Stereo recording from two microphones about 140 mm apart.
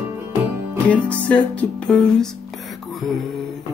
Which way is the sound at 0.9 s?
10° left (ahead or behind).